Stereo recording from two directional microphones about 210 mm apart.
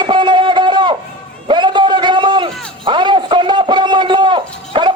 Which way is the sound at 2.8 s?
20° right (ahead or behind).